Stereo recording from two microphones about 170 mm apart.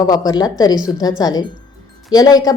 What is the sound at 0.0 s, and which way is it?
A woman's voice, 20° left (ahead or behind).